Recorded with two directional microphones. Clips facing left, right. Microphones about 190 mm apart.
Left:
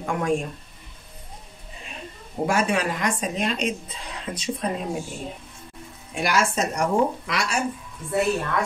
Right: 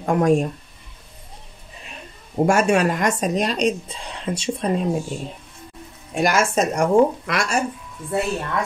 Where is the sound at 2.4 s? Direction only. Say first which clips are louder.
Right 6 dB; 45° right (ahead or behind); by 4.6 s 30° right (ahead or behind).